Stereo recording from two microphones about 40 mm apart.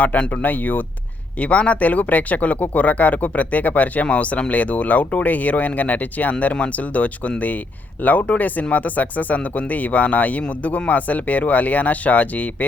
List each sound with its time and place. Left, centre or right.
0.3 s speech: left
1.4 s speech: left